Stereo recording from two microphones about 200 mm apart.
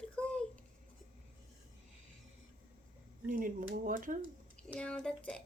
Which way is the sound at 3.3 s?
45° right (ahead or behind).